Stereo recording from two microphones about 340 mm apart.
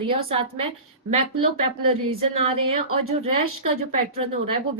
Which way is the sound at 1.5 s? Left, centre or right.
Right.